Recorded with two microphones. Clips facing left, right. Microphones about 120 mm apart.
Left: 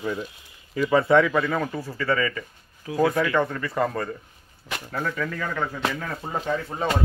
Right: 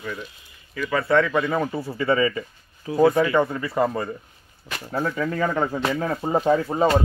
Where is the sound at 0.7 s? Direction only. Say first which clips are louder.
Left 2 dB; 20° left (ahead or behind).